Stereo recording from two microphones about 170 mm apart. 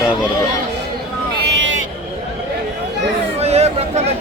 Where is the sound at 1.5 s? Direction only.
90° right.